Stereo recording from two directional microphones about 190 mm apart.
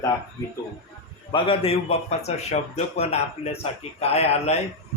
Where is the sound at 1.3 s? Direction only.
25° left (ahead or behind).